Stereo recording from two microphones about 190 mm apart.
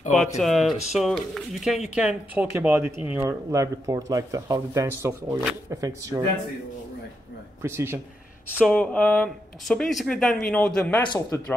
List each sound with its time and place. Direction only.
0.4 s speech: centre (ahead or behind); by 6.2 s 15° right (ahead or behind)
7.6 s speech: 15° right (ahead or behind)
8.5 s speech: 5° left (ahead or behind)
11.1 s a man's voice: 15° left (ahead or behind)